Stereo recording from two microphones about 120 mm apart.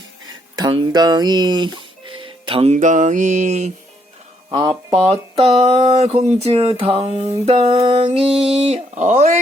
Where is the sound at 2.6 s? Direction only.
85° right.